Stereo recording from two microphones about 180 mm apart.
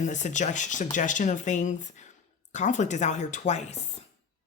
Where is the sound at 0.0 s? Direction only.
40° left (ahead or behind).